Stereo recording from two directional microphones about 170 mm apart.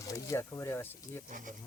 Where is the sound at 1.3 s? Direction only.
50° right (ahead or behind).